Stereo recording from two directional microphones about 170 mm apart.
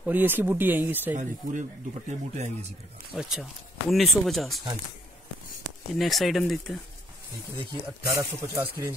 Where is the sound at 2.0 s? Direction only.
40° right (ahead or behind).